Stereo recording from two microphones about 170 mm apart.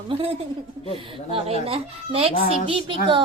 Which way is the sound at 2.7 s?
30° right (ahead or behind).